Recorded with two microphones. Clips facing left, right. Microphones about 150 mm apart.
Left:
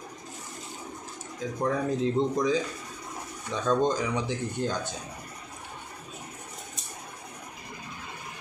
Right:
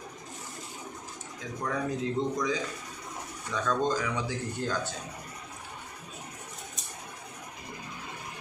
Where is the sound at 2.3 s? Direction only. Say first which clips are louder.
Left 5 dB; 30° left (ahead or behind).